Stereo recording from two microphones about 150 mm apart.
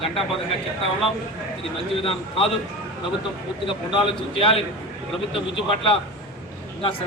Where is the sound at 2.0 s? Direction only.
40° left (ahead or behind).